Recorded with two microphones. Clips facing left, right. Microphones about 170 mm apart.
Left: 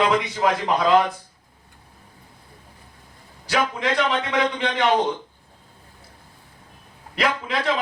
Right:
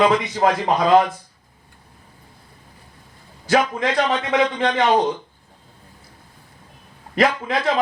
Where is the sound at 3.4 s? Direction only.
45° right (ahead or behind).